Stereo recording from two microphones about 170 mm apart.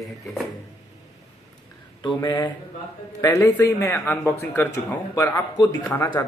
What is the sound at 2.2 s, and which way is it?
Speech, 25° left (ahead or behind).